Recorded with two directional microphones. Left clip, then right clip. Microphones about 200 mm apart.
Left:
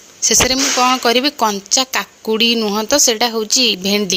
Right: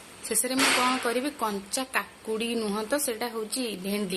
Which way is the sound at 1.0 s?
45° left (ahead or behind).